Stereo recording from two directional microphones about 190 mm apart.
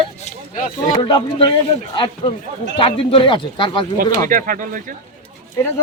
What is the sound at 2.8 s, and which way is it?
A man's voice, 30° left (ahead or behind).